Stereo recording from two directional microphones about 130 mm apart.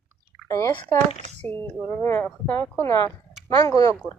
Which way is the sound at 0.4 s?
25° left (ahead or behind).